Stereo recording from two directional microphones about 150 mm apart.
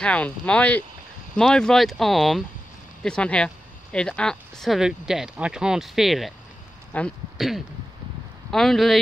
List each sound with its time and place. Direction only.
0.0 s speech: 5° left (ahead or behind)
6.9 s speech: 10° left (ahead or behind)
7.3 s a sound: centre (ahead or behind)
8.5 s speech: centre (ahead or behind)